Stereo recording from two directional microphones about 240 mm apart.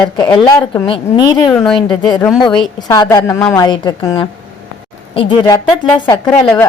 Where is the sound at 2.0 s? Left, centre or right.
Centre.